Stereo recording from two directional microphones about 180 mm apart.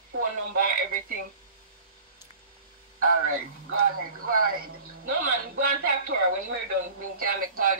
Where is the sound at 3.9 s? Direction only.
50° right (ahead or behind).